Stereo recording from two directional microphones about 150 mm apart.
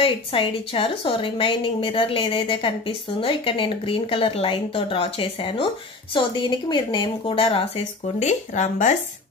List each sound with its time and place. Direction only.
0.0 s speech: 35° left (ahead or behind); by 8.9 s 55° left (ahead or behind)